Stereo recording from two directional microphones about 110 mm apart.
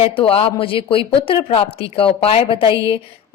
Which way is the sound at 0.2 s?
60° left (ahead or behind).